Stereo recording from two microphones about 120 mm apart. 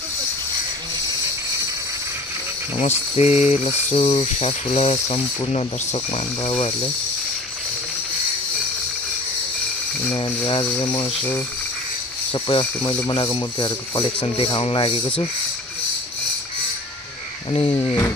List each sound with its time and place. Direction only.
2.8 s speech: 65° left (ahead or behind)
10.1 s speech: 40° left (ahead or behind)
12.3 s speech: 45° left (ahead or behind)
14.2 s speech: 50° left (ahead or behind)
17.5 s speech: 45° left (ahead or behind)
17.7 s speech: 30° left (ahead or behind)